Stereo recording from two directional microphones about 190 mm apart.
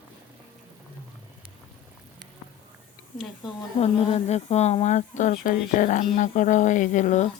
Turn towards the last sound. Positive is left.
turn(degrees=40)  # may be behind; listen again after turning